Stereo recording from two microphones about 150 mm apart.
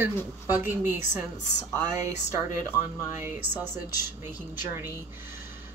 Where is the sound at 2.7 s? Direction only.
15° right (ahead or behind).